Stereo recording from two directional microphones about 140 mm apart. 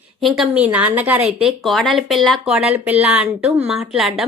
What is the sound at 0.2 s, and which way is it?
A woman's voice, centre (ahead or behind).